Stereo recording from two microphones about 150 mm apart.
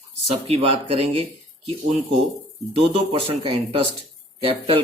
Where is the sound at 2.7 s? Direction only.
35° right (ahead or behind).